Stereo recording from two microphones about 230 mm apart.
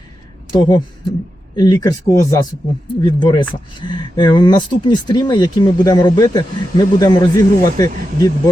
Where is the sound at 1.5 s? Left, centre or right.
Centre.